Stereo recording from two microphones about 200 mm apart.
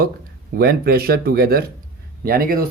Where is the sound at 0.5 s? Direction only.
50° right (ahead or behind).